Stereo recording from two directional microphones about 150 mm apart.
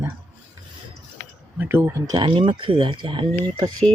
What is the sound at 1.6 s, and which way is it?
Speech, 15° right (ahead or behind).